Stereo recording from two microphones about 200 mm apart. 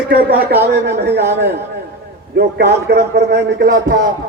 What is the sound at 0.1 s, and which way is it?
A man's voice, 50° right (ahead or behind).